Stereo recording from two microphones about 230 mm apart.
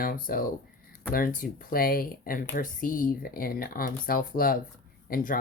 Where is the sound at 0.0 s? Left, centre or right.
Left.